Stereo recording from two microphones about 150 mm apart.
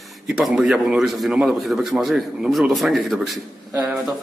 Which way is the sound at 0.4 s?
5° right (ahead or behind).